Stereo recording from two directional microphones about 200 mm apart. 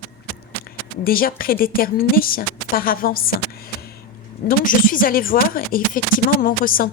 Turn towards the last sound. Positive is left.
turn(degrees=45)  # may be behind; listen again after turning